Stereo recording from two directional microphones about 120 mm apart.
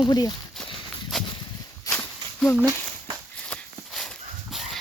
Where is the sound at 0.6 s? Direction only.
5° left (ahead or behind).